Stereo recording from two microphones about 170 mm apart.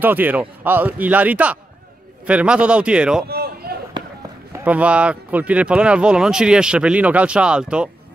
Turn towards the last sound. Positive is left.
turn(degrees=-5)  # may be behind; listen again after turning